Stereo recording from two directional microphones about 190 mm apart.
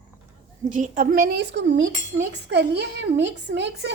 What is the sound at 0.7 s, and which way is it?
A woman's voice, 45° right (ahead or behind).